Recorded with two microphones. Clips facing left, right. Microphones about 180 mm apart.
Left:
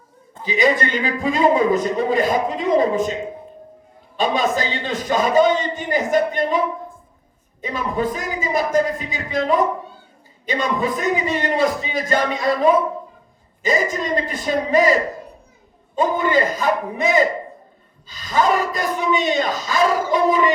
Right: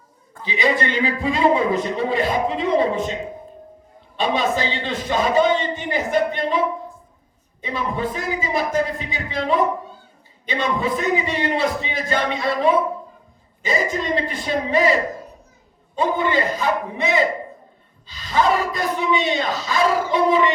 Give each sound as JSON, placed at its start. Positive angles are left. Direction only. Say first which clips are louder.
{"t": 0.4, "sound": "a man's voice", "louder": "left 2 dB", "side_deg": 45}
{"t": 4.2, "sound": "a man's voice", "louder": "left 1 dB", "side_deg": 45}
{"t": 7.6, "sound": "a man's voice", "louder": "left 2 dB", "side_deg": 45}
{"t": 16.0, "sound": "a man's voice", "louder": "left 2 dB", "side_deg": 45}